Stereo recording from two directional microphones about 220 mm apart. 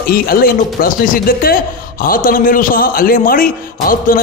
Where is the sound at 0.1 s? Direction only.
40° left (ahead or behind).